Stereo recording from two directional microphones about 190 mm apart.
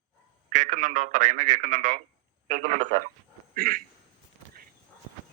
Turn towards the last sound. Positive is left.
turn(degrees=-50)  # may be behind; listen again after turning